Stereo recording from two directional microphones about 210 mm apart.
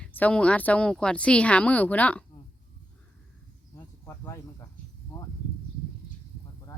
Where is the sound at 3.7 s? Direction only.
15° left (ahead or behind).